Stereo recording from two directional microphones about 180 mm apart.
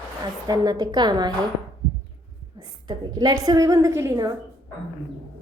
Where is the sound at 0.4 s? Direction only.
20° right (ahead or behind).